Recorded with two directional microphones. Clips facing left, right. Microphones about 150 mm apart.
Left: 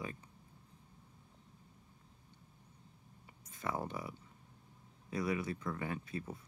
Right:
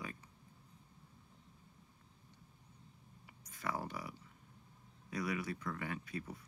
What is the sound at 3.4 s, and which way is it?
Speech, 25° left (ahead or behind).